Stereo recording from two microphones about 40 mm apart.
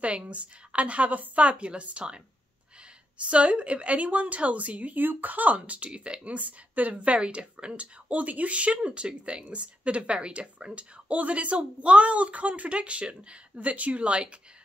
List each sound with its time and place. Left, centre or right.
0.0 s speech: right